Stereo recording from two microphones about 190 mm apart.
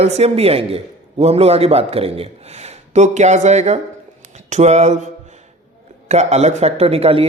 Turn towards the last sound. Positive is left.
turn(degrees=-30)  # may be behind; listen again after turning